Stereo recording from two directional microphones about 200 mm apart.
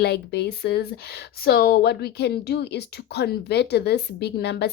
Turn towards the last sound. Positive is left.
turn(degrees=55)  # may be behind; listen again after turning